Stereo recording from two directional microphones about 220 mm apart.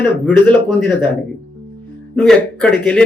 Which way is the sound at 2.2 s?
5° left (ahead or behind).